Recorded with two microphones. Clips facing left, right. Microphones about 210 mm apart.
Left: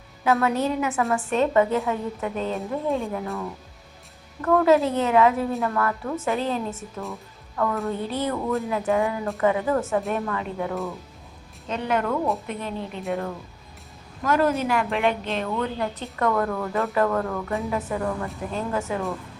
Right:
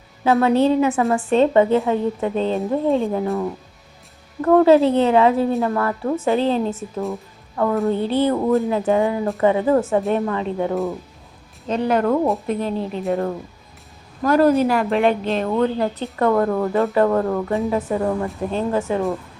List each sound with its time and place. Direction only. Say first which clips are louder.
0.3 s a woman's voice: right 6 dB; 30° right (ahead or behind)
4.4 s a woman's voice: right 6 dB; 30° right (ahead or behind)
7.1 s music: right 8 dB; 30° right (ahead or behind)
7.9 s a woman's voice: right 8 dB; 30° right (ahead or behind)